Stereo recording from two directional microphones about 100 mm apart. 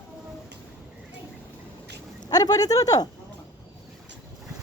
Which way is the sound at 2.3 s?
40° left (ahead or behind).